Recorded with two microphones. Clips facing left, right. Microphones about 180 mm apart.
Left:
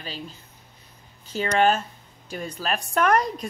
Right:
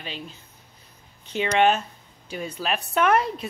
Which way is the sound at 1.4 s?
5° right (ahead or behind).